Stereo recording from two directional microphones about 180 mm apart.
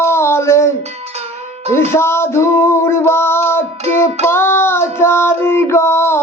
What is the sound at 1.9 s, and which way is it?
Music, 15° left (ahead or behind).